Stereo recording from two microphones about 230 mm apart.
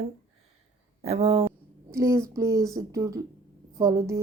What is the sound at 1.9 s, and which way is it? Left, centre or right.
Speech, centre.